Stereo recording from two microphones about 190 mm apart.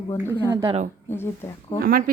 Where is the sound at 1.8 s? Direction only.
50° right (ahead or behind).